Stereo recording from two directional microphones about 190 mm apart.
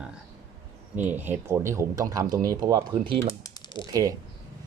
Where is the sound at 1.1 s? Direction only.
10° right (ahead or behind).